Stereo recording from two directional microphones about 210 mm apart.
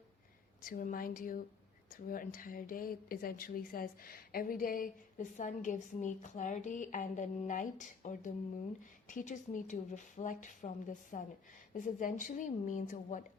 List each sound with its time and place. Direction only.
0.6 s a woman's voice: 40° left (ahead or behind)